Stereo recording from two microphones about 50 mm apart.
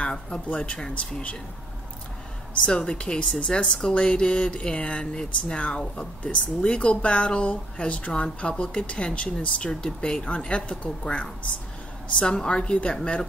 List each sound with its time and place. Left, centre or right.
0.0 s speech: left
0.7 s a woman's voice: centre
2.6 s a woman's voice: centre